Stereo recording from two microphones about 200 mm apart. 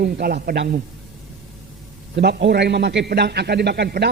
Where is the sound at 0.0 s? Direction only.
50° right (ahead or behind).